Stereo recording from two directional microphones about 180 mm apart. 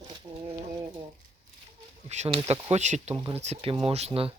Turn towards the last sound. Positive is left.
turn(degrees=-35)  # may be behind; listen again after turning